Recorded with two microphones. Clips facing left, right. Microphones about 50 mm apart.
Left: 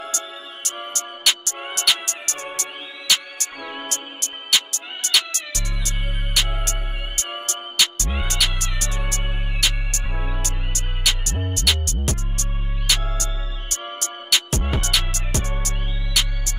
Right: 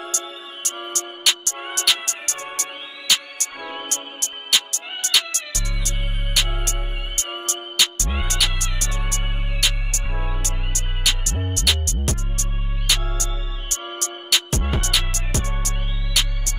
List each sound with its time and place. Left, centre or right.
0.6 s music: centre